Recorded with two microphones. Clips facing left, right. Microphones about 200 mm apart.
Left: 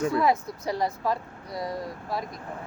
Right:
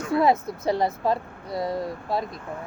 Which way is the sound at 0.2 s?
25° right (ahead or behind).